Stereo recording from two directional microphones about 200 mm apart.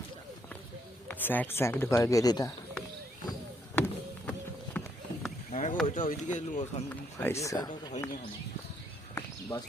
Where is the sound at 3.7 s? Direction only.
10° left (ahead or behind).